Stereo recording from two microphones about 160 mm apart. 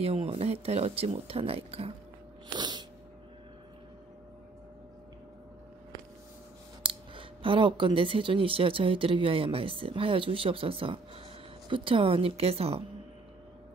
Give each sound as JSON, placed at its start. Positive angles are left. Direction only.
{"t": 0.0, "sound": "speech", "side_deg": -40}
{"t": 2.5, "sound": "a sound", "side_deg": -25}
{"t": 6.8, "sound": "speech", "side_deg": -35}